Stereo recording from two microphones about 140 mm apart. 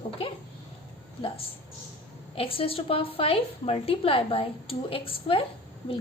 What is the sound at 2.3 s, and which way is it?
A woman's voice, 40° left (ahead or behind).